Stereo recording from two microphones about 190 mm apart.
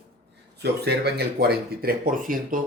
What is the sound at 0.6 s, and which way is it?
Speech, 60° right (ahead or behind).